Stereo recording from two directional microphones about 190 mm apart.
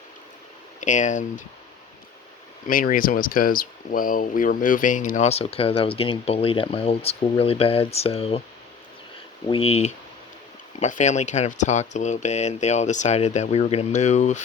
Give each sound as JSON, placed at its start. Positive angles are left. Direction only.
{"t": 0.8, "sound": "speech", "side_deg": 40}
{"t": 2.6, "sound": "speech", "side_deg": 45}
{"t": 9.5, "sound": "speech", "side_deg": 30}